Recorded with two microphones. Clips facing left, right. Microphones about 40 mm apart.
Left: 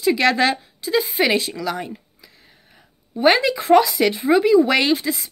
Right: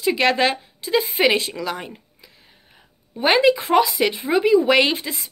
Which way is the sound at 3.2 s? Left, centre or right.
Right.